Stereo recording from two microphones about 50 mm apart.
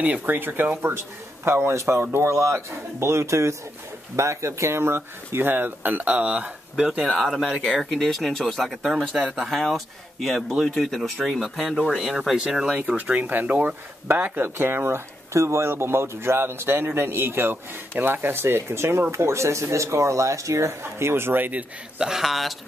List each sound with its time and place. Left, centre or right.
0.0 s speech: right
0.8 s a man's voice: right
7.2 s speech: centre
9.2 s speech: right
9.5 s speech: centre
12.8 s speech: right
14.6 s a man's voice: right
15.7 s speech: right
19.1 s speech: right
21.1 s speech: right
21.5 s speech: right
22.0 s speech: centre